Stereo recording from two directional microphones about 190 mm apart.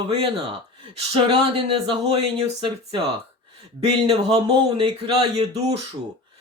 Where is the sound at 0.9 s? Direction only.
30° right (ahead or behind).